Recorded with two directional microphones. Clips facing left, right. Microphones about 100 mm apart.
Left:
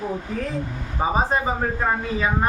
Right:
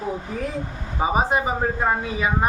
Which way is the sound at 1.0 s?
15° right (ahead or behind).